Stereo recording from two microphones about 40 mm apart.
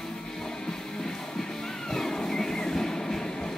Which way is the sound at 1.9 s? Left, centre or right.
Centre.